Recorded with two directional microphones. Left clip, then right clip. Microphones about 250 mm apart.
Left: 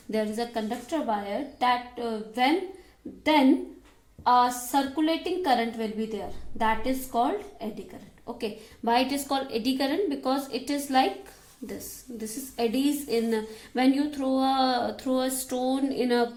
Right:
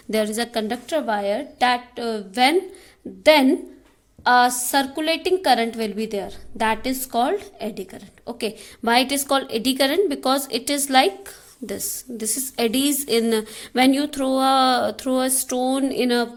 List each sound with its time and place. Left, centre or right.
0.1 s a woman's voice: right
4.2 s a woman's voice: right